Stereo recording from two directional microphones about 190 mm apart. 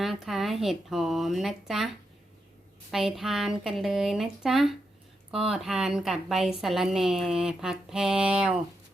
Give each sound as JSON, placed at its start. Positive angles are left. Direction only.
{"t": 0.0, "sound": "a woman's voice", "side_deg": 0}
{"t": 2.9, "sound": "a woman's voice", "side_deg": 0}